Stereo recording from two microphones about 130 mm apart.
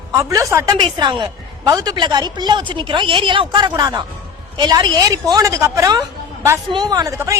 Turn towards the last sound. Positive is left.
turn(degrees=-25)  # may be behind; listen again after turning